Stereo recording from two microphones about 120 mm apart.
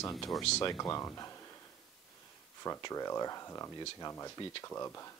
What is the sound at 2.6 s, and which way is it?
Speech, 30° left (ahead or behind).